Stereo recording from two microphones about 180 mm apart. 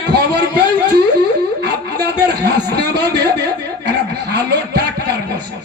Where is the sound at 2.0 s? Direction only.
65° right (ahead or behind).